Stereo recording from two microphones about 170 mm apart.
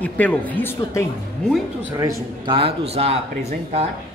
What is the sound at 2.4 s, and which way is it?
Speech, 35° right (ahead or behind).